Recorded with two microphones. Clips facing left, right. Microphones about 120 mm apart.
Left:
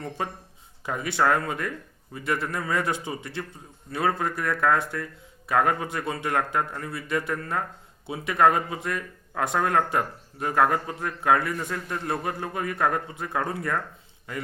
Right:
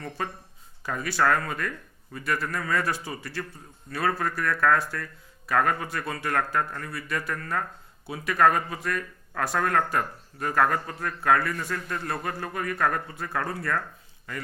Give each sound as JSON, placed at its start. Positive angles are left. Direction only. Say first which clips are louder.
{"t": 0.2, "sound": "speech", "louder": "left 1 dB", "side_deg": 20}